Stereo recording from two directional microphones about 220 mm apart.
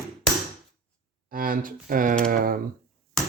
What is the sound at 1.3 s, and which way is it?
Speech, 40° right (ahead or behind).